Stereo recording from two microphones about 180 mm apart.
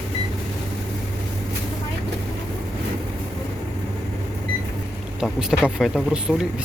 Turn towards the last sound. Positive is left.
turn(degrees=-5)  # may be behind; listen again after turning